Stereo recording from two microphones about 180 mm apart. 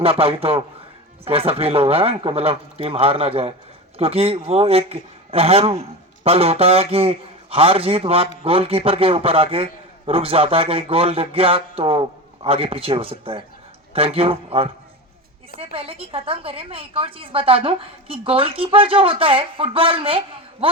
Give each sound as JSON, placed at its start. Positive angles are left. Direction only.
{"t": 0.0, "sound": "a woman's voice", "side_deg": -30}
{"t": 15.7, "sound": "a woman's voice", "side_deg": -30}